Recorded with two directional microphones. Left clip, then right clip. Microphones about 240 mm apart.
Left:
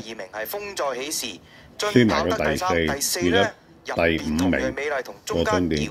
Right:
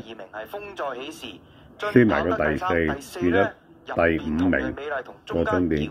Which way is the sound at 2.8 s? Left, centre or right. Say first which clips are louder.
Left 2 dB; left.